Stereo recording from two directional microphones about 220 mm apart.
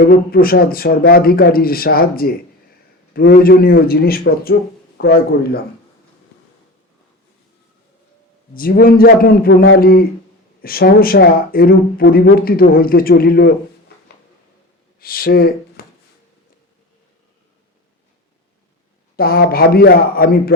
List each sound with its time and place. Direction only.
0.0 s speech: 40° left (ahead or behind)
8.5 s a man's voice: 40° left (ahead or behind)
14.9 s speech: 40° left (ahead or behind)
19.1 s speech: 45° left (ahead or behind)